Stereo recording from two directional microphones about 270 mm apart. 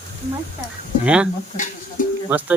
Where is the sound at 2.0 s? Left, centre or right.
Left.